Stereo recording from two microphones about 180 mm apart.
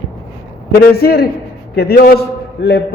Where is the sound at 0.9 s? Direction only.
60° left (ahead or behind).